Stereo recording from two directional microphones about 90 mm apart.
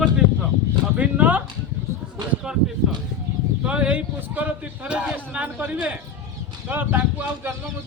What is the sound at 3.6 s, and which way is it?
Speech, 15° right (ahead or behind).